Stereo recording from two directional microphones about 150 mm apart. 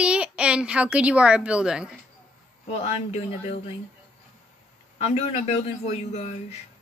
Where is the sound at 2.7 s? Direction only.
45° left (ahead or behind).